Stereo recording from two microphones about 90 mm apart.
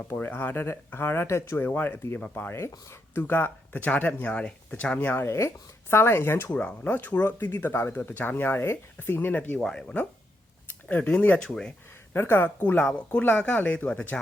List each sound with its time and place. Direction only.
0.0 s speech: 20° left (ahead or behind)
3.2 s speech: 20° left (ahead or behind)
6.5 s speech: 15° left (ahead or behind)
12.1 s speech: 25° left (ahead or behind)